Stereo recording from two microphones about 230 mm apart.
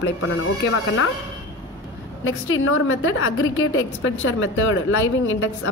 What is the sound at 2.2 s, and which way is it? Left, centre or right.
A woman's voice, left.